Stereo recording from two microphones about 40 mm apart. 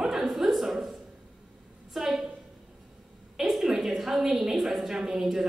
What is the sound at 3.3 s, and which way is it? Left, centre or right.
A woman's voice, centre.